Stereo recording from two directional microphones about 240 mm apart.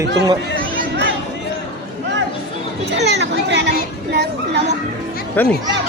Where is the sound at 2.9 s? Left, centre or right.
Right.